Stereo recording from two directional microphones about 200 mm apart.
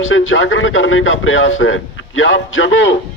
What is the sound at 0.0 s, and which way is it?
Speech, 75° left (ahead or behind).